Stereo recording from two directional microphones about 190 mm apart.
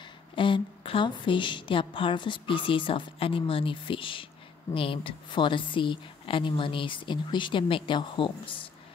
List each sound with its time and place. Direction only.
0.4 s a woman's voice: 25° left (ahead or behind)